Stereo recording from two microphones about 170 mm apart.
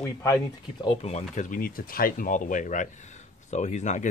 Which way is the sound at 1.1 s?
45° left (ahead or behind).